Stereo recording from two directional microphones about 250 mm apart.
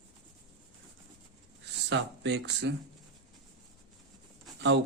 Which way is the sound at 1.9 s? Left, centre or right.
Right.